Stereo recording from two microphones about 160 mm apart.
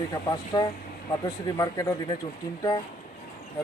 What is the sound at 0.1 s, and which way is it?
A man's voice, 25° left (ahead or behind).